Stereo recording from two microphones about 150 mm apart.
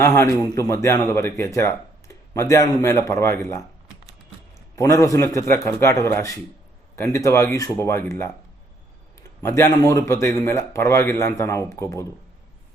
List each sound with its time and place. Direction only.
0.0 s a man's voice: 20° left (ahead or behind)
4.7 s a man's voice: 20° left (ahead or behind)
9.4 s a man's voice: 20° left (ahead or behind)